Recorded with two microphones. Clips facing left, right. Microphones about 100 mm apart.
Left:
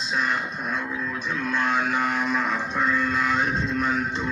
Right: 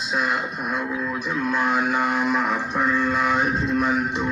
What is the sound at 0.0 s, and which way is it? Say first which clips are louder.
Music: right 2 dB; 10° right (ahead or behind).